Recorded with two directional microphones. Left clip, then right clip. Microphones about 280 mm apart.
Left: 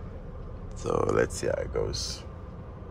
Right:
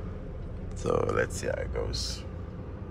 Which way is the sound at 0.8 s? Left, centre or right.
Centre.